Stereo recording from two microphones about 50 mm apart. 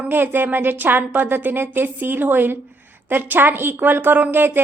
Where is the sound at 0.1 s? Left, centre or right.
Right.